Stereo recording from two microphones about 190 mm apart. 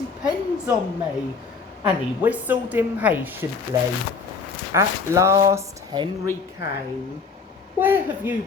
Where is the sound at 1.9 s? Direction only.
10° right (ahead or behind).